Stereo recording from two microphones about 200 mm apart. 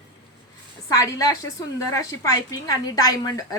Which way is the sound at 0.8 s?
15° left (ahead or behind).